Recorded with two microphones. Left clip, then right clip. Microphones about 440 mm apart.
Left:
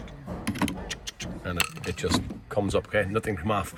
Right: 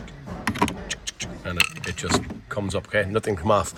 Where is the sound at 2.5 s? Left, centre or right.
Centre.